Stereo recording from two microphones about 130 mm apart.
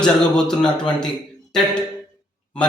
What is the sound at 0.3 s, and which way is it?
Speech, 5° left (ahead or behind).